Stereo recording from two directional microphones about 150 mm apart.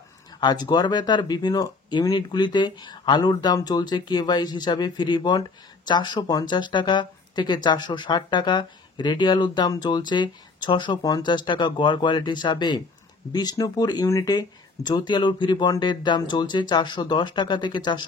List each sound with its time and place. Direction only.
0.4 s speech: 30° left (ahead or behind)